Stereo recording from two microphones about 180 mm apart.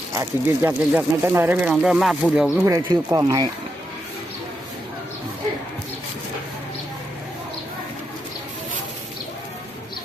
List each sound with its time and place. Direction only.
0.1 s speech: 15° right (ahead or behind)
2.6 s speech: 20° right (ahead or behind)